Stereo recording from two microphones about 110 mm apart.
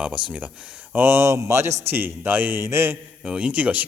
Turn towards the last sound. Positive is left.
turn(degrees=-10)  # may be behind; listen again after turning